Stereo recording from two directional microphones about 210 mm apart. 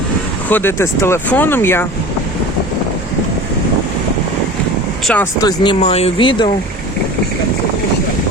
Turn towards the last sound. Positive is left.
turn(degrees=25)  # may be behind; listen again after turning